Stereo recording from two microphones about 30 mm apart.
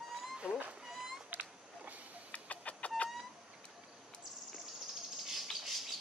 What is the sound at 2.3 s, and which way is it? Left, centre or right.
Chicken, left.